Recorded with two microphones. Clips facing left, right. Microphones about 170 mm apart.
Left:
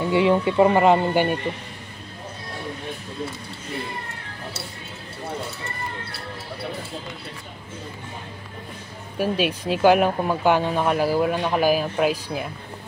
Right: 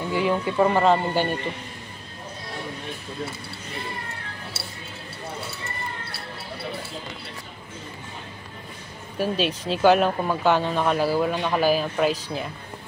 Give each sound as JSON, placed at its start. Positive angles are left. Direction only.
{"t": 0.1, "sound": "speech", "side_deg": 25}
{"t": 9.2, "sound": "speech", "side_deg": 10}